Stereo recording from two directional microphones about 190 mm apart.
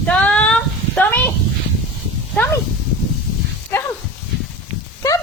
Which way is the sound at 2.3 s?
10° left (ahead or behind).